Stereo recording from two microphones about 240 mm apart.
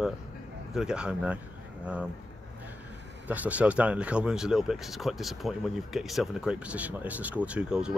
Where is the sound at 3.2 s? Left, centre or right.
Centre.